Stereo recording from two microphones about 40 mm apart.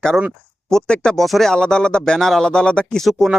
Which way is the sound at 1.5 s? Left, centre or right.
Centre.